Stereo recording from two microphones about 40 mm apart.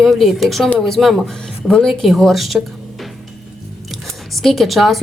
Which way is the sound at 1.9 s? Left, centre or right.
Centre.